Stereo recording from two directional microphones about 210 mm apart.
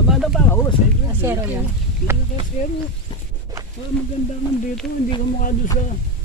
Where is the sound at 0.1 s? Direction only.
Centre (ahead or behind).